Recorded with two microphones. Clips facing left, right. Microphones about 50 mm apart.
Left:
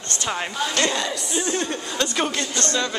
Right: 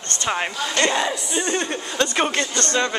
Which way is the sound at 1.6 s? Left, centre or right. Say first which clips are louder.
Right 2 dB; right.